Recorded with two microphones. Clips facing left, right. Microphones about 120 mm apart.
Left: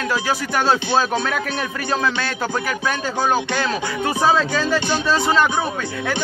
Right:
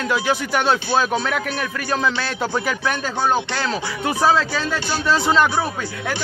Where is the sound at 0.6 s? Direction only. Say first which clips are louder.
Left 2 dB; centre (ahead or behind).